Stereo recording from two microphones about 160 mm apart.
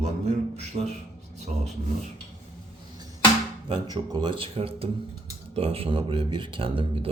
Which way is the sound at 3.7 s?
25° right (ahead or behind).